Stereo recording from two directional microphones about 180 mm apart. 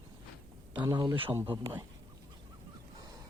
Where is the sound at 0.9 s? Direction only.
25° right (ahead or behind).